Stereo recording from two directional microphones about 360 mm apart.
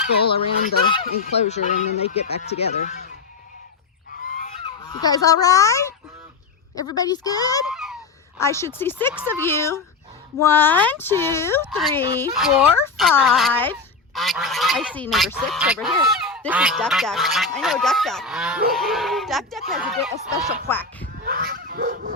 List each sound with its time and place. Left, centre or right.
0.3 s speech: centre
4.2 s goose: left
6.7 s speech: centre
7.7 s a sound: centre
8.4 s speech: centre
21.2 s dog: right